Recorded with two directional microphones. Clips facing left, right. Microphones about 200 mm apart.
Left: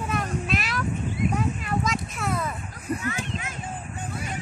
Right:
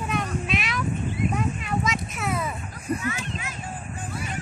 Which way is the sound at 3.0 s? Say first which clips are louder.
Even; 40° left (ahead or behind).